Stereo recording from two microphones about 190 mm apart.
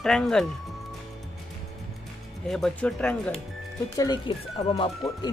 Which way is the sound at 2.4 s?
5° left (ahead or behind).